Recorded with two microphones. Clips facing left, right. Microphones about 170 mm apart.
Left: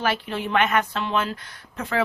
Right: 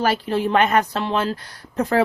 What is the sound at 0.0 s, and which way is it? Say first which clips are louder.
A woman's voice: right 6 dB; 40° right (ahead or behind).